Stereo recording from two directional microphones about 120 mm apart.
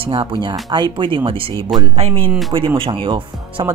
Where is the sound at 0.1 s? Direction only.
45° right (ahead or behind).